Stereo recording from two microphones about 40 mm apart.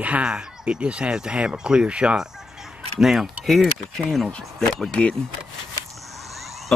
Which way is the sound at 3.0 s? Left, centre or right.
Centre.